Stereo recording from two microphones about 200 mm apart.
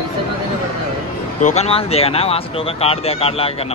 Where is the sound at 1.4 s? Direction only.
30° left (ahead or behind).